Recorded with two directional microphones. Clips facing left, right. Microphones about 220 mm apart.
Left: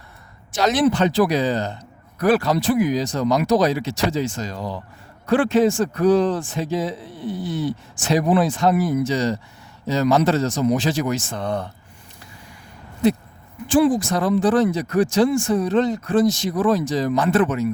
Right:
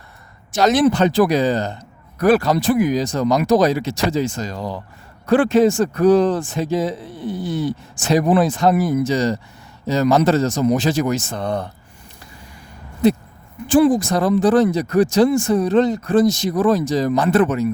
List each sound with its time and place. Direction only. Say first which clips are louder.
0.5 s speech: right 3 dB; 45° right (ahead or behind)
13.7 s speech: right 3 dB; 45° right (ahead or behind)